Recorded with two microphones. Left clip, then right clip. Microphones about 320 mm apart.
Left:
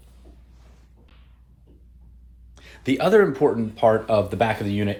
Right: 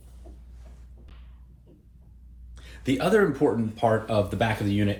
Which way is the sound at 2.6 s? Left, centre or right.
Left.